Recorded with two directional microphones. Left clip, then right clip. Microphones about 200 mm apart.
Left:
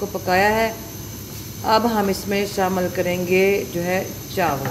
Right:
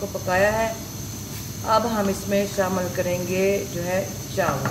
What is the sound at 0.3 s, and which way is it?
Speech, 40° left (ahead or behind).